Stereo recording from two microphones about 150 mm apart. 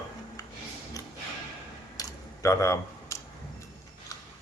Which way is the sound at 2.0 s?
20° left (ahead or behind).